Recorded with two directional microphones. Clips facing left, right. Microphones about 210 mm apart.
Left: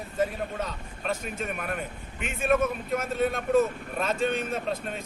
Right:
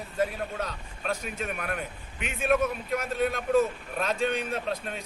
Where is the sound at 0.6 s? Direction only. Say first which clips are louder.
Left 1 dB; 5° left (ahead or behind).